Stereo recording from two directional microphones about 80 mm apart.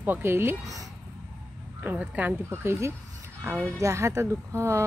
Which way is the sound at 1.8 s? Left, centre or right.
Centre.